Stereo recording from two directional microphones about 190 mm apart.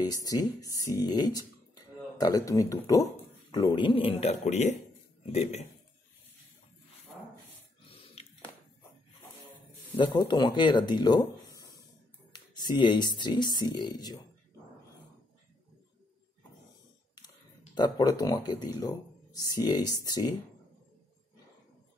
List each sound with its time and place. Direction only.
0.0 s speech: 20° left (ahead or behind); by 5.7 s 35° left (ahead or behind)
7.9 s a sound: 30° left (ahead or behind)
9.9 s speech: 25° left (ahead or behind)
17.7 s speech: 20° left (ahead or behind)